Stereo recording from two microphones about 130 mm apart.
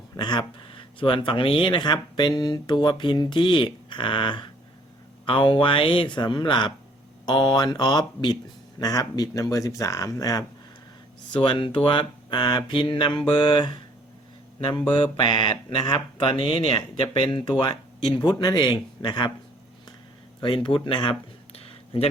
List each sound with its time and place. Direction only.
0.2 s speech: 35° left (ahead or behind)
11.3 s speech: 40° left (ahead or behind)
20.7 s a sound: 40° left (ahead or behind)